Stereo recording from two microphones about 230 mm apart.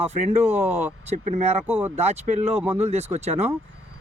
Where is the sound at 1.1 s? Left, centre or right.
Right.